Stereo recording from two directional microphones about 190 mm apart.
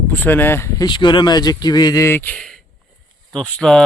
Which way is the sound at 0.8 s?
25° left (ahead or behind).